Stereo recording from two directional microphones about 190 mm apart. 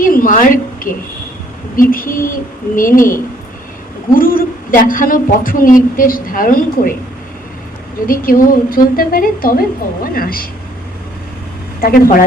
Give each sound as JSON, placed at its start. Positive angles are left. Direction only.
{"t": 0.0, "sound": "a sound", "side_deg": 45}
{"t": 1.7, "sound": "a man's voice", "side_deg": 45}
{"t": 4.1, "sound": "a man's voice", "side_deg": 50}
{"t": 8.0, "sound": "a man's voice", "side_deg": 50}
{"t": 11.8, "sound": "a man's voice", "side_deg": 50}